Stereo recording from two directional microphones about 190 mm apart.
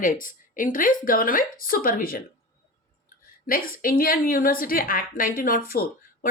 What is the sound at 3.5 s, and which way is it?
Speech, 50° left (ahead or behind).